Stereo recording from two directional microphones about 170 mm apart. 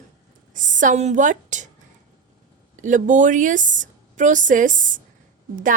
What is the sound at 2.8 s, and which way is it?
A woman's voice, 50° right (ahead or behind).